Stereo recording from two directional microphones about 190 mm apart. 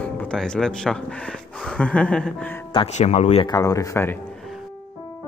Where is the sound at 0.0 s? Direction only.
5° left (ahead or behind).